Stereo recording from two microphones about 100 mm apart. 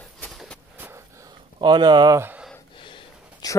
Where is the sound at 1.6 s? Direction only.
50° right (ahead or behind).